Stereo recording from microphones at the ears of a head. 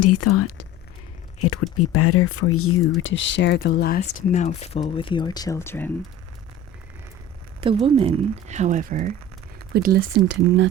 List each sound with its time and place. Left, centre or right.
0.0 s speech: left
7.6 s speech: right